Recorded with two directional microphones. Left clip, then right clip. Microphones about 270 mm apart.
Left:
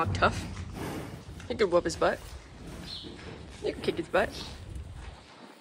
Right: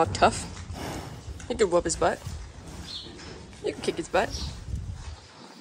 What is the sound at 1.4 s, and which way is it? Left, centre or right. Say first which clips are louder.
Speech: right 2 dB; centre.